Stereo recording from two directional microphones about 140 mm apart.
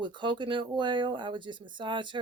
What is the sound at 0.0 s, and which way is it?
Speech, 35° right (ahead or behind).